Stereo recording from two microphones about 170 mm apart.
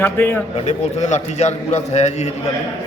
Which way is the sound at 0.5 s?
40° left (ahead or behind).